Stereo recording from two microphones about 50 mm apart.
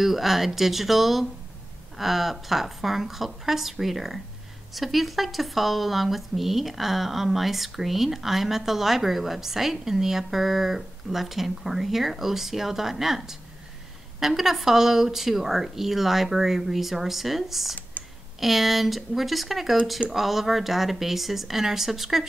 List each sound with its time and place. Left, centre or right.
0.0 s speech: centre
18.0 s a sound: left
18.4 s speech: centre